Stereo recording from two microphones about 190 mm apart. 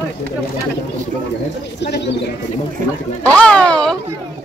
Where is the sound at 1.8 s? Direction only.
65° left (ahead or behind).